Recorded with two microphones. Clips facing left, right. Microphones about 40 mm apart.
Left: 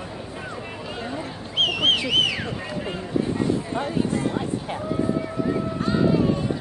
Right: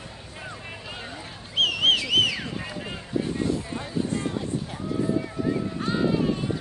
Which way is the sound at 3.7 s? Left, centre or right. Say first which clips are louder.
Left 5 dB; left.